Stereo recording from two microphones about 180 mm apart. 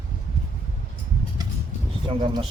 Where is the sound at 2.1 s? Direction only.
25° right (ahead or behind).